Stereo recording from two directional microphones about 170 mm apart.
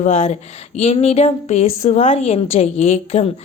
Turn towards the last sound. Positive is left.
turn(degrees=35)  # may be behind; listen again after turning